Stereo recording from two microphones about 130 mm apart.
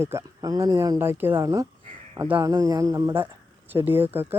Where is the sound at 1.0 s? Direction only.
15° right (ahead or behind).